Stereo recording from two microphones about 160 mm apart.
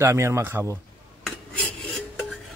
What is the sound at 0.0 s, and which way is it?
Speech, 15° right (ahead or behind).